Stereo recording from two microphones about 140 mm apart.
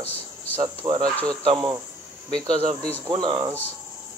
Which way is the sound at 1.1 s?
5° left (ahead or behind).